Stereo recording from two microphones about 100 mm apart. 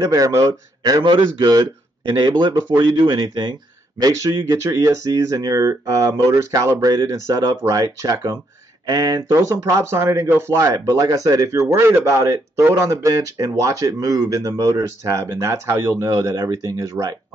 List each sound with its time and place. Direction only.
0.0 s a man's voice: 35° right (ahead or behind)
1.0 s speech: 50° right (ahead or behind)
4.0 s a man's voice: 35° right (ahead or behind)